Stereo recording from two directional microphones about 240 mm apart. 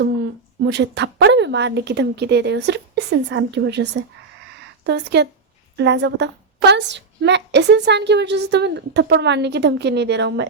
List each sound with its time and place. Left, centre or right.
0.6 s a woman's voice: right